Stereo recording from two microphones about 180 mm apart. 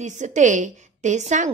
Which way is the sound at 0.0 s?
40° right (ahead or behind).